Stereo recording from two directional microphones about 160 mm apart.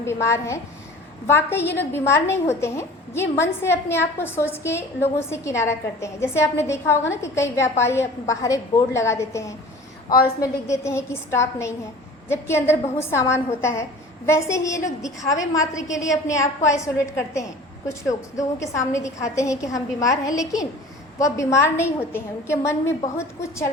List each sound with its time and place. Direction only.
0.0 s a woman's voice: 15° left (ahead or behind)
10.4 s a woman's voice: 20° left (ahead or behind)